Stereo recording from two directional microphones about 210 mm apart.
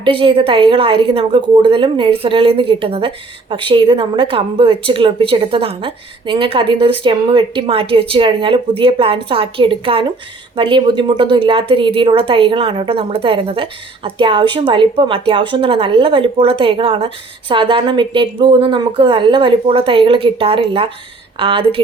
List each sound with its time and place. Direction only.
0.0 s a woman's voice: 25° right (ahead or behind)